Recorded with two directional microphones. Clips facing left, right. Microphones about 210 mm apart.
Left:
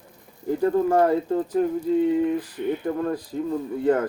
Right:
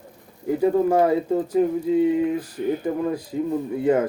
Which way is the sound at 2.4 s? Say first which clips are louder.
Right 2 dB; 40° right (ahead or behind).